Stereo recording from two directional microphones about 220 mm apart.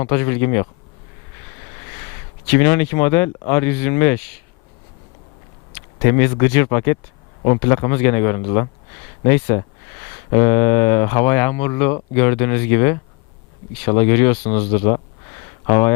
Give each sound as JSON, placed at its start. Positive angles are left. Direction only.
{"t": 0.0, "sound": "speech", "side_deg": 15}
{"t": 2.5, "sound": "speech", "side_deg": 10}
{"t": 6.0, "sound": "speech", "side_deg": 10}